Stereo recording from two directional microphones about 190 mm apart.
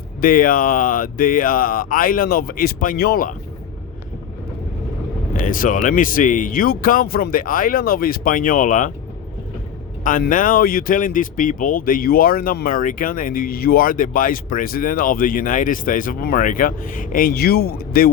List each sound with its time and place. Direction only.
0.2 s speech: 50° left (ahead or behind)
5.4 s speech: 45° left (ahead or behind)
10.0 s speech: 45° left (ahead or behind)